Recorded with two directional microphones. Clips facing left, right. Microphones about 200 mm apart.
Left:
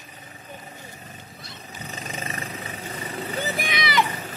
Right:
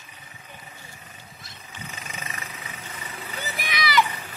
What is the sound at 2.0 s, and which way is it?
Vehicle, 35° left (ahead or behind).